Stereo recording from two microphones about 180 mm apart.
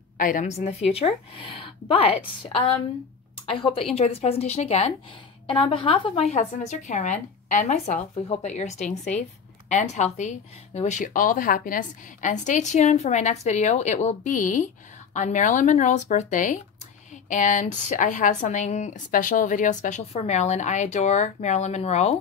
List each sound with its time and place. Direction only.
0.2 s a woman's voice: 45° left (ahead or behind)